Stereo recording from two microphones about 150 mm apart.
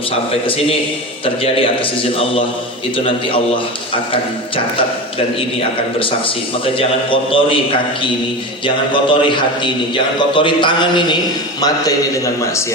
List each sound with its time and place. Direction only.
0.4 s a man's voice: 40° left (ahead or behind)
5.5 s a man's voice: 35° left (ahead or behind)
8.6 s a man's voice: 35° left (ahead or behind)